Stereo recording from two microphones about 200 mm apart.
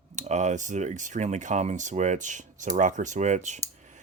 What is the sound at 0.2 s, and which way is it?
Speech, 35° right (ahead or behind).